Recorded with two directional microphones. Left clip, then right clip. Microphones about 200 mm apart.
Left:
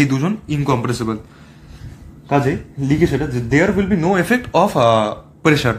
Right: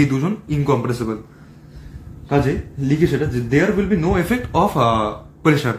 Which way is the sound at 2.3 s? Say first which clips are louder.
Left 2 dB; 25° left (ahead or behind).